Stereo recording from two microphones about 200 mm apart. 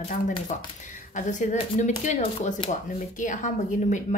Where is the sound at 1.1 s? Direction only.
40° left (ahead or behind).